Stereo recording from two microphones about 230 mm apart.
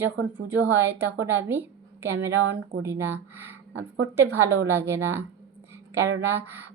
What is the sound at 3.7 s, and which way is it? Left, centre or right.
Speech, right.